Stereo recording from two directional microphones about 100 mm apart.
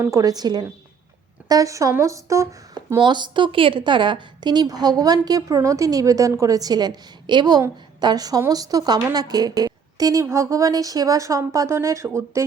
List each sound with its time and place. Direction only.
0.0 s a woman's voice: 35° right (ahead or behind)
3.0 s a woman's voice: 50° right (ahead or behind); by 12.4 s 30° right (ahead or behind)